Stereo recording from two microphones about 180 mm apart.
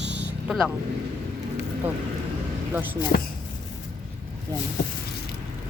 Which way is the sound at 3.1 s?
55° left (ahead or behind).